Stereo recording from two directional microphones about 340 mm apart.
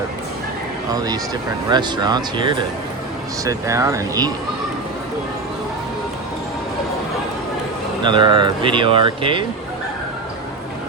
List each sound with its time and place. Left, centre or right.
0.9 s speech: centre
8.0 s speech: centre